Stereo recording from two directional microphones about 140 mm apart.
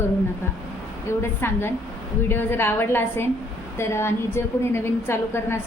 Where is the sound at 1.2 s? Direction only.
15° left (ahead or behind).